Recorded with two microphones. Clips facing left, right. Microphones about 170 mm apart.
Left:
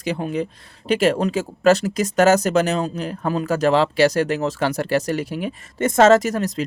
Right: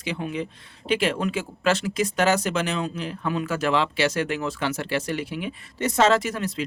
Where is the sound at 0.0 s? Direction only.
40° left (ahead or behind).